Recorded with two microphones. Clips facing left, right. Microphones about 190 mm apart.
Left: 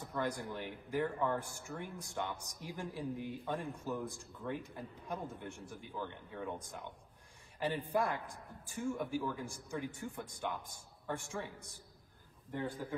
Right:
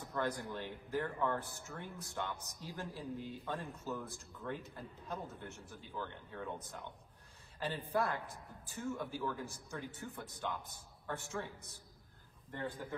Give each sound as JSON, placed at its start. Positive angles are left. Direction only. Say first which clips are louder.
{"t": 0.1, "sound": "a man's voice", "louder": "even", "side_deg": 15}